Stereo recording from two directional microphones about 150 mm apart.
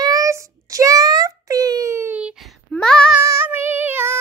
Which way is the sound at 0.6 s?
25° right (ahead or behind).